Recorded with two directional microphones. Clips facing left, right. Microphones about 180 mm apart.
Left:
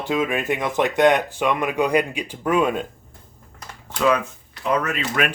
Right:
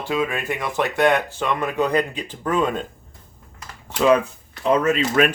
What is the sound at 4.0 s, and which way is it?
Speech, 30° right (ahead or behind).